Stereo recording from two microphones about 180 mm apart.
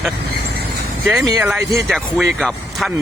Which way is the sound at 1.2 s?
20° right (ahead or behind).